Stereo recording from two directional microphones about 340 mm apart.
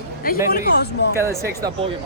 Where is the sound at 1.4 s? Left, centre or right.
Centre.